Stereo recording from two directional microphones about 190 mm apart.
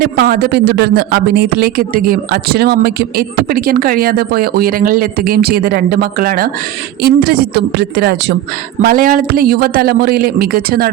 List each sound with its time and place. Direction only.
0.0 s speech: 55° right (ahead or behind)